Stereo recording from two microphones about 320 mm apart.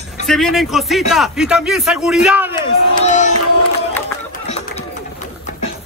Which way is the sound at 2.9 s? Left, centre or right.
Left.